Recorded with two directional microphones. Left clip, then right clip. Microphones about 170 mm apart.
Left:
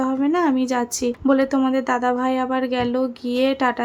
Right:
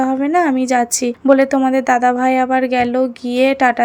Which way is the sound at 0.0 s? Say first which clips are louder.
Right 5 dB; 20° right (ahead or behind).